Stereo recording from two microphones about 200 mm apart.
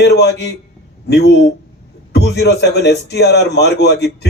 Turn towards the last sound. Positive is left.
turn(degrees=55)  # may be behind; listen again after turning